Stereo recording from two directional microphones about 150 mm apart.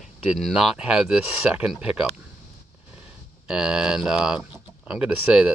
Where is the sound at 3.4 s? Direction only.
5° right (ahead or behind).